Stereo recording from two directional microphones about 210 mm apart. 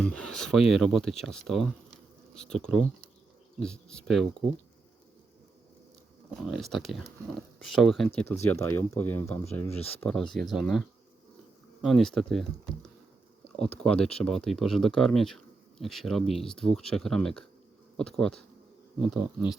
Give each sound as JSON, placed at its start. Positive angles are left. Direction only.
{"t": 0.0, "sound": "speech", "side_deg": 5}
{"t": 6.4, "sound": "speech", "side_deg": 0}
{"t": 9.6, "sound": "speech", "side_deg": 30}
{"t": 10.0, "sound": "speech", "side_deg": 5}